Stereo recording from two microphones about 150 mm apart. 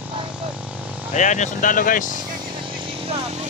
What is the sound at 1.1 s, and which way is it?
Speech, 55° left (ahead or behind).